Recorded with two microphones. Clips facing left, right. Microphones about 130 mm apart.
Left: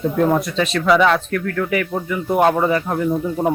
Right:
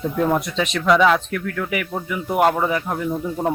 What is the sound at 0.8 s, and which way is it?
Speech, centre (ahead or behind).